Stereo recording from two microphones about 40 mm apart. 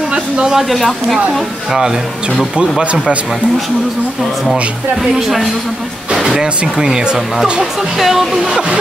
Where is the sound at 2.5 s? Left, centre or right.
Right.